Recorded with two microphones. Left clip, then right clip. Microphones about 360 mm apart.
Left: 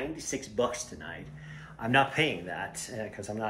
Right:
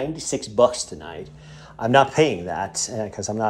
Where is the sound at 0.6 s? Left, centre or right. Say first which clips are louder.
Right 13 dB; centre.